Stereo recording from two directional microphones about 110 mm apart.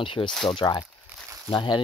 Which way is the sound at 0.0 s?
50° left (ahead or behind).